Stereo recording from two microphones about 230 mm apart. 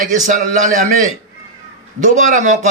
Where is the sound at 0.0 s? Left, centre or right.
Right.